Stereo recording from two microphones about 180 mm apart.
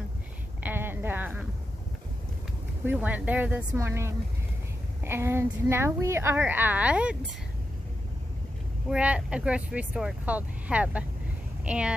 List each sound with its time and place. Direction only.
0.7 s a sound: 10° right (ahead or behind)
2.9 s speech: 10° right (ahead or behind)
8.9 s speech: 5° right (ahead or behind)